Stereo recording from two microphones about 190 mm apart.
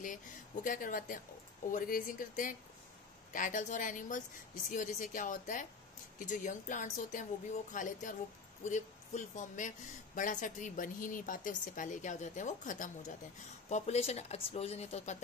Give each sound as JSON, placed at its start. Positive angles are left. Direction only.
{"t": 0.7, "sound": "speech", "side_deg": 45}